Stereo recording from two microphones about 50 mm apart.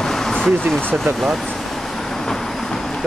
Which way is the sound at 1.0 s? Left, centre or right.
Centre.